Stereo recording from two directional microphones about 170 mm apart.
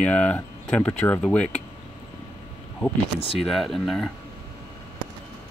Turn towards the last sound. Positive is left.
turn(degrees=0)  # may be behind; listen again after turning